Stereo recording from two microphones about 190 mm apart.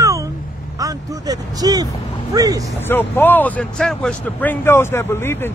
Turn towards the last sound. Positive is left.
turn(degrees=10)  # may be behind; listen again after turning